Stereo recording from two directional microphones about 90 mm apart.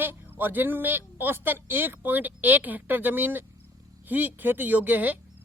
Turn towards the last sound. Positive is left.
turn(degrees=-20)  # may be behind; listen again after turning